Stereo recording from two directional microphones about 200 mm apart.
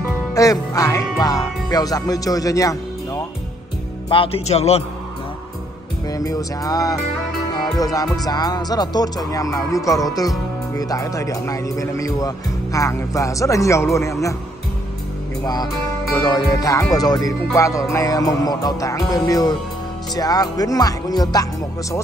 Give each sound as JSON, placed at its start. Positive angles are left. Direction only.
{"t": 0.3, "sound": "speech", "side_deg": 15}
{"t": 4.1, "sound": "speech", "side_deg": 25}
{"t": 6.0, "sound": "music", "side_deg": 15}
{"t": 7.6, "sound": "speech", "side_deg": 20}
{"t": 15.4, "sound": "speech", "side_deg": 20}